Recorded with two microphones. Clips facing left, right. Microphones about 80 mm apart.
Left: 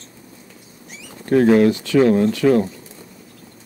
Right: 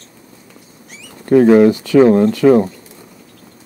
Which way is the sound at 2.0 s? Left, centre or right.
Centre.